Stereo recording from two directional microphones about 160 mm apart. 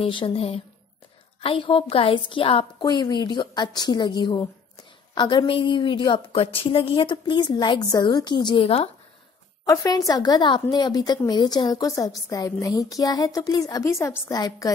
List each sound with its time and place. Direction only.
0.0 s a woman's voice: 35° left (ahead or behind)
9.7 s a woman's voice: 20° left (ahead or behind)